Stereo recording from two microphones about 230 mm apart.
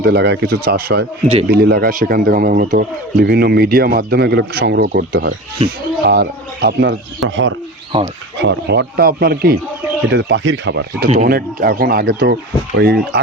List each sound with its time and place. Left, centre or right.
0.0 s a man's voice: right
7.9 s speech: right
8.4 s speech: right
11.1 s a man's voice: right